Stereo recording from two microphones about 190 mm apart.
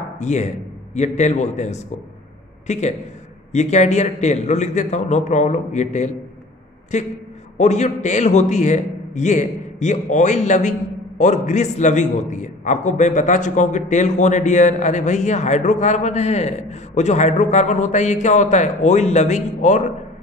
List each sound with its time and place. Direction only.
0.2 s a man's voice: 40° left (ahead or behind)